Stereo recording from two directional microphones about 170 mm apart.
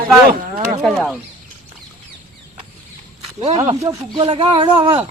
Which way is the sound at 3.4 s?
35° right (ahead or behind).